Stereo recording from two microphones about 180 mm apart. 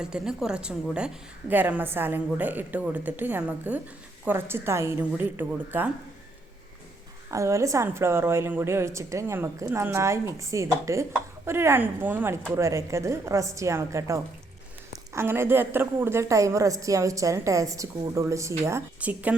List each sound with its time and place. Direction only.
0.0 s a woman's voice: 5° right (ahead or behind)
7.3 s a woman's voice: 15° right (ahead or behind)